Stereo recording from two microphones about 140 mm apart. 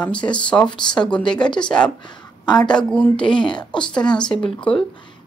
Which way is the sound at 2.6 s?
10° left (ahead or behind).